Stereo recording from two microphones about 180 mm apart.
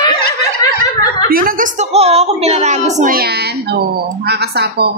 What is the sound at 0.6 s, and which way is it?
Snicker, 20° left (ahead or behind).